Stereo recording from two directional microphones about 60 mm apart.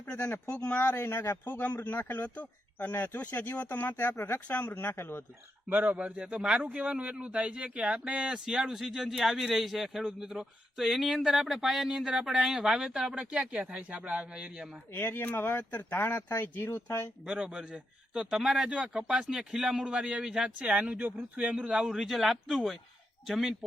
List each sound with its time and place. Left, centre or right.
0.1 s speech: centre
1.0 s speech: left
1.5 s speech: left
4.4 s speech: left
5.6 s a man's voice: right
14.9 s speech: left
16.0 s speech: left
17.2 s a man's voice: centre
21.8 s speech: centre